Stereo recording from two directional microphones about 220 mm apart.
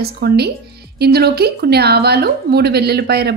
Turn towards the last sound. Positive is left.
turn(degrees=-45)  # may be behind; listen again after turning